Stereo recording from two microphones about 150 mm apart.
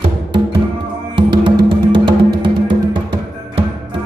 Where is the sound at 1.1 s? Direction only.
30° right (ahead or behind).